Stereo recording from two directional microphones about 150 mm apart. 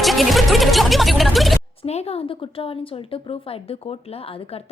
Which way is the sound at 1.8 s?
45° left (ahead or behind).